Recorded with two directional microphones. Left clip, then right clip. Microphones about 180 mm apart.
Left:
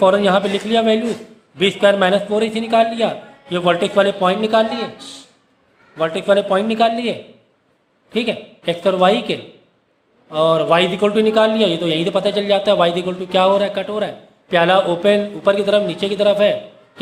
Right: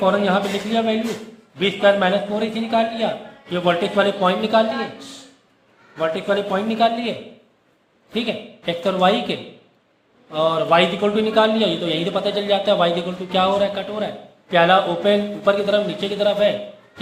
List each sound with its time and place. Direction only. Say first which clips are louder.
0.0 s a man's voice: left 5 dB; 50° left (ahead or behind); by 4.6 s 30° left (ahead or behind)
6.0 s a man's voice: left 5 dB; 45° left (ahead or behind)